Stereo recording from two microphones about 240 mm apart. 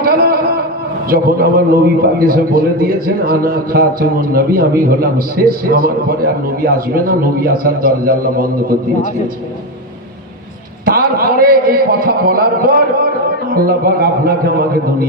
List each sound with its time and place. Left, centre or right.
0.0 s a sound: right
1.1 s a man's voice: right
10.8 s a man's voice: right